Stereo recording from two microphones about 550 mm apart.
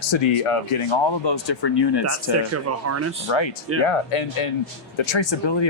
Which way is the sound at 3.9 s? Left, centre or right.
Left.